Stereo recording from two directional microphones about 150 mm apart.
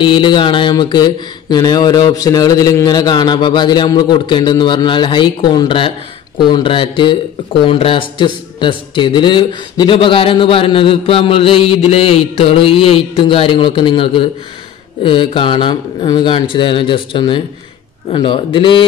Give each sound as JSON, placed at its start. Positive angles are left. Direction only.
{"t": 0.0, "sound": "speech", "side_deg": 30}